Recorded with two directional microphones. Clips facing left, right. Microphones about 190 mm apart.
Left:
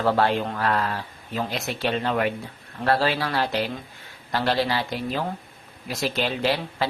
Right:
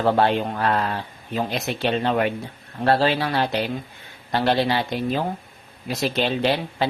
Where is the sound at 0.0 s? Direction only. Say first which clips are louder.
Right 2 dB; 20° right (ahead or behind).